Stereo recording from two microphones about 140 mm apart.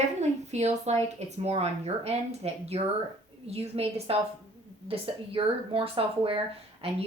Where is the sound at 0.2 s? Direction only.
55° right (ahead or behind).